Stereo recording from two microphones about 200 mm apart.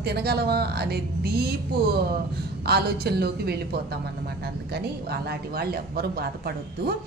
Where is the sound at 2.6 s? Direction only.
55° right (ahead or behind).